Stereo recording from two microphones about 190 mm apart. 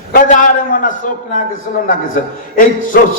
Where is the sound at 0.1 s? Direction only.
45° left (ahead or behind).